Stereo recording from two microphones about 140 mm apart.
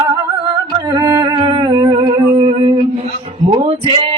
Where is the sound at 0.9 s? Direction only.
25° right (ahead or behind).